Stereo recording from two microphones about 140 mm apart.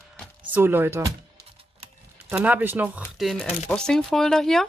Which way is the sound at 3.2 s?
Centre (ahead or behind).